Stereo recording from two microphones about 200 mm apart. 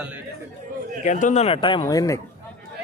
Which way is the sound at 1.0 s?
40° left (ahead or behind).